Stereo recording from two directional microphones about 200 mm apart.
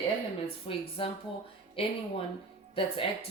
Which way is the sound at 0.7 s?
30° left (ahead or behind).